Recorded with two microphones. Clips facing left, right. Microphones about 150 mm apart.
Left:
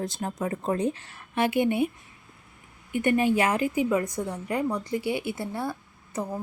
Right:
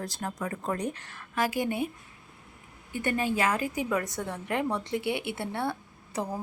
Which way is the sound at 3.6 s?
40° right (ahead or behind).